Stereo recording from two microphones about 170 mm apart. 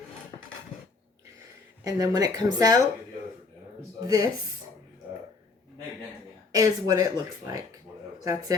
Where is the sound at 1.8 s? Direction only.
20° right (ahead or behind).